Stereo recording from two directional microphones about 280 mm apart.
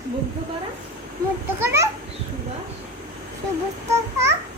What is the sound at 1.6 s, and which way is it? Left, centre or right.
Children playing, centre.